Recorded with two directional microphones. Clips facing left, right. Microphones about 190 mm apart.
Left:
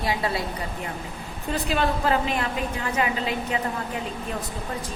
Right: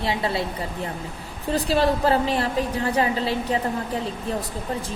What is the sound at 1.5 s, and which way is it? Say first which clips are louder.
A woman's voice: right 4 dB; 35° right (ahead or behind).